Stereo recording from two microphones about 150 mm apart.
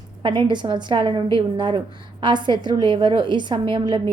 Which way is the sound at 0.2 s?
35° right (ahead or behind).